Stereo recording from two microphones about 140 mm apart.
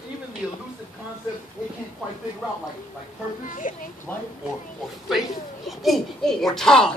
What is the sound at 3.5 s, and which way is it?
Speech, 70° left (ahead or behind).